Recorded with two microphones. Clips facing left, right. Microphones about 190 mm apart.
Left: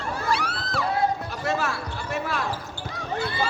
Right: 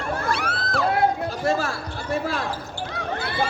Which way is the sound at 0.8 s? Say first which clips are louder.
Right 4 dB; 65° right (ahead or behind).